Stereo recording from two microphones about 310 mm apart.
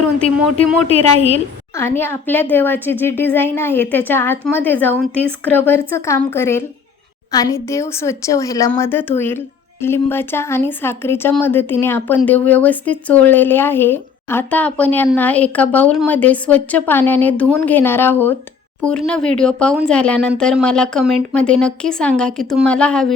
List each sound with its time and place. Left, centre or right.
0.2 s speech: centre
0.9 s a woman's voice: centre
1.7 s a woman's voice: centre